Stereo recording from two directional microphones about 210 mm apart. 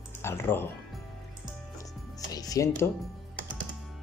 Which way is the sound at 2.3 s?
15° left (ahead or behind).